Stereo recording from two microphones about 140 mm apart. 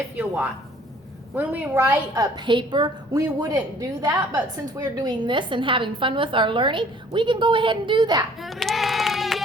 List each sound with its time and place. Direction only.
1.4 s a woman's voice: 15° right (ahead or behind)
2.2 s a woman's voice: 35° right (ahead or behind)
8.4 s a sound: centre (ahead or behind)